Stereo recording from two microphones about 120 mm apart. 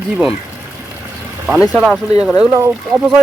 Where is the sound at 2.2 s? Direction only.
5° right (ahead or behind).